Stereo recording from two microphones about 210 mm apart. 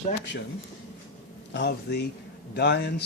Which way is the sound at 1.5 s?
55° left (ahead or behind).